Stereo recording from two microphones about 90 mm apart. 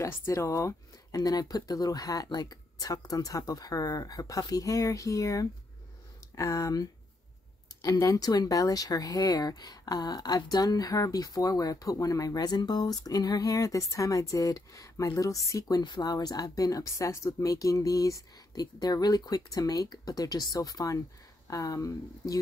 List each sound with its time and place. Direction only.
0.1 s speech: 30° left (ahead or behind)
15.8 s speech: 50° left (ahead or behind)